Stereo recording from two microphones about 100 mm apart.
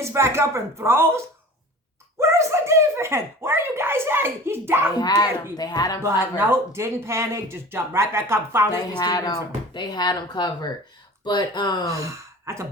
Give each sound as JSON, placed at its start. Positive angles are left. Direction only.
{"t": 0.0, "sound": "speech", "side_deg": -25}
{"t": 4.9, "sound": "speech", "side_deg": 40}
{"t": 6.3, "sound": "speech", "side_deg": -25}
{"t": 8.7, "sound": "speech", "side_deg": 40}
{"t": 11.9, "sound": "speech", "side_deg": -30}